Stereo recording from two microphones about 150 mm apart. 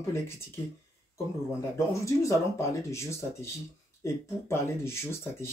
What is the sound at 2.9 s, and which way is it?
Speech, 20° left (ahead or behind).